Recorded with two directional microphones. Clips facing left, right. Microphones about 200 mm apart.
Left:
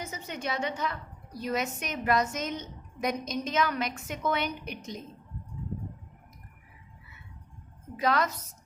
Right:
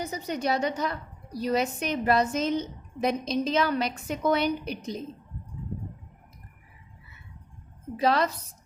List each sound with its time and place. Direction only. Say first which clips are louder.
0.0 s a woman's voice: right 6 dB; 35° right (ahead or behind)
7.9 s a woman's voice: right 3 dB; 30° right (ahead or behind)